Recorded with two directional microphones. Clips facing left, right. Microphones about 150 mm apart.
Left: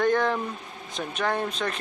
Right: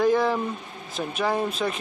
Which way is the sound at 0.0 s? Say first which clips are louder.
Right 2 dB; 5° right (ahead or behind).